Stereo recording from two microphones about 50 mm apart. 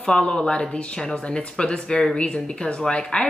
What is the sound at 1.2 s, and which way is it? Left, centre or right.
Speech, left.